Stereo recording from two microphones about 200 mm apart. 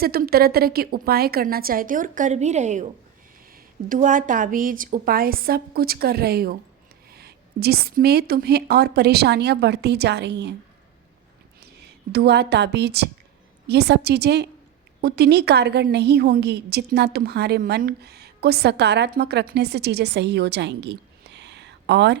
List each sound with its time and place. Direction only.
0.0 s a woman's voice: 50° right (ahead or behind)
11.6 s a woman's voice: 55° right (ahead or behind)